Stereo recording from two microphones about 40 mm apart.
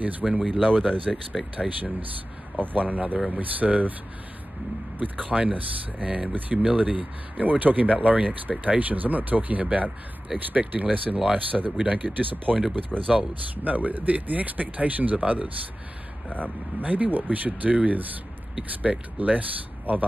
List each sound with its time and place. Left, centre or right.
0.2 s speech: centre
0.5 s speech: centre
2.6 s speech: right
4.9 s speech: right
7.4 s speech: right
12.9 s speech: centre
13.7 s speech: right
16.3 s speech: right